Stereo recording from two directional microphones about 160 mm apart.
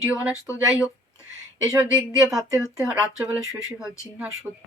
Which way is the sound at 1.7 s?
20° right (ahead or behind).